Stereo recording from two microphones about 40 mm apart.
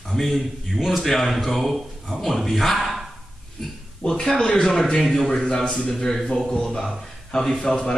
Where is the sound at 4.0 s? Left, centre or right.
Centre.